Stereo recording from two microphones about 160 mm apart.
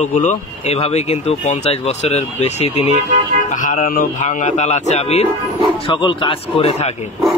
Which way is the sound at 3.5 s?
55° left (ahead or behind).